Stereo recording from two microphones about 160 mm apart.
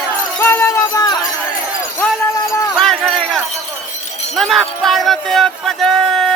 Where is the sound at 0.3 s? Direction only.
15° left (ahead or behind).